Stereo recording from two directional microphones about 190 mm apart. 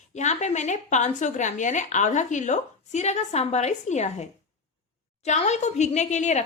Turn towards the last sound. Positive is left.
turn(degrees=35)  # may be behind; listen again after turning